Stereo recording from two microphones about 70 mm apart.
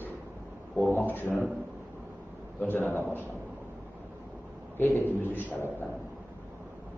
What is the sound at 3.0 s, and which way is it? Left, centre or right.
Speech, right.